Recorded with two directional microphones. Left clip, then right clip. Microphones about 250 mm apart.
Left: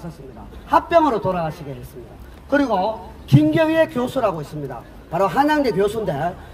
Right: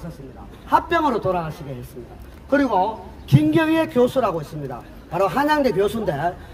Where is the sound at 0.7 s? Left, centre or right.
Centre.